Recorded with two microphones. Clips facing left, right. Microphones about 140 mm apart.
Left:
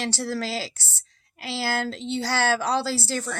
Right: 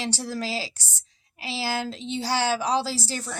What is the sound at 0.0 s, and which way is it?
Speech, 15° right (ahead or behind).